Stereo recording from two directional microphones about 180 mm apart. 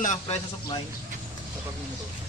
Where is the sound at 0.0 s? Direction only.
40° left (ahead or behind).